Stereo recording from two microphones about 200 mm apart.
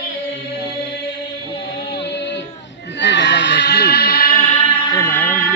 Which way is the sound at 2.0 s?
60° left (ahead or behind).